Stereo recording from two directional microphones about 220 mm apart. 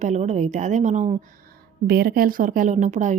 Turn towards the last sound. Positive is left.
turn(degrees=-35)  # may be behind; listen again after turning